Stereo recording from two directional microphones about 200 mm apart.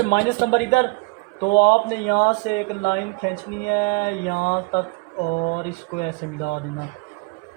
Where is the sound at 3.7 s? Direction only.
50° left (ahead or behind).